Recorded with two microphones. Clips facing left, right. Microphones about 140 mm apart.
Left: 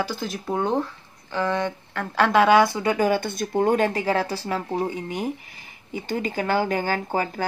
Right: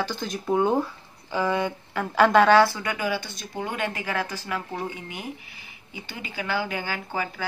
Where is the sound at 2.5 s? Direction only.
20° left (ahead or behind).